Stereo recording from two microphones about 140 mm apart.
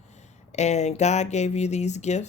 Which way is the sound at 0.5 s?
55° left (ahead or behind).